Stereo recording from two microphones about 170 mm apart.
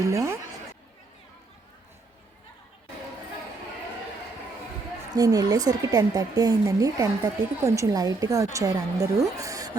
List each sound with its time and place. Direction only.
0.0 s speech: 20° right (ahead or behind)
5.1 s a woman's voice: 20° right (ahead or behind)